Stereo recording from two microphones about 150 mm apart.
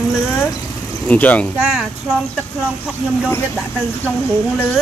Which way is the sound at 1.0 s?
10° left (ahead or behind).